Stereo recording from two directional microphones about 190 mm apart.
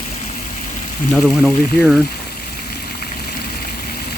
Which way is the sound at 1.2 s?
Centre (ahead or behind).